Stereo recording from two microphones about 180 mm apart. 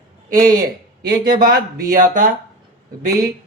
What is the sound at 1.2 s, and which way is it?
Speech, 55° right (ahead or behind).